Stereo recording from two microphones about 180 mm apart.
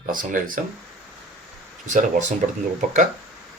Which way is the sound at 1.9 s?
45° right (ahead or behind).